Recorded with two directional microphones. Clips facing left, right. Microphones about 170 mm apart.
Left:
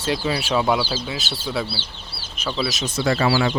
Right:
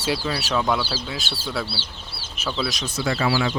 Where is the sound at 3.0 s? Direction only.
45° left (ahead or behind).